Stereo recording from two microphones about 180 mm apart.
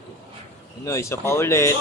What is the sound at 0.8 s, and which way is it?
Speech, 15° left (ahead or behind).